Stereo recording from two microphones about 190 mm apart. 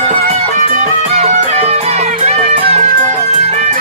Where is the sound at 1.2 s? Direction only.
35° right (ahead or behind).